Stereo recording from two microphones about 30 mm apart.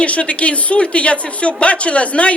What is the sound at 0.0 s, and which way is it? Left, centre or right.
A man's voice, left.